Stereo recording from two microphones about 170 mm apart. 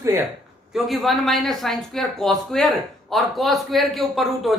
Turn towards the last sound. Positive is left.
turn(degrees=0)  # may be behind; listen again after turning